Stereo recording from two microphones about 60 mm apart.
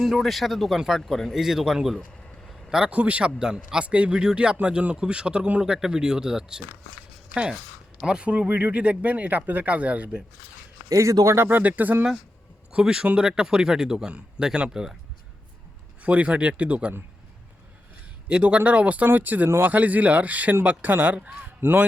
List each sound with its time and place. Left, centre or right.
0.0 s speech: centre
2.5 s vehicle: centre
2.9 s speech: right
8.0 s speech: centre
10.8 s a man's voice: right
11.4 s speech: right
12.7 s speech: centre
16.0 s speech: right
18.3 s speech: centre; by 21.8 s right